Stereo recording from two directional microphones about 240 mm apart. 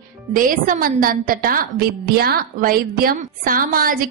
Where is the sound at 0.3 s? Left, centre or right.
Right.